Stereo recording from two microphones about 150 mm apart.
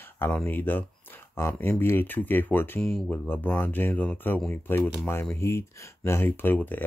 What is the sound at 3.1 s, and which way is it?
Speech, 15° left (ahead or behind).